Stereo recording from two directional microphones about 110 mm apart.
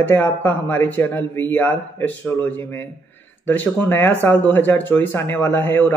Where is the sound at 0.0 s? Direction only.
15° left (ahead or behind).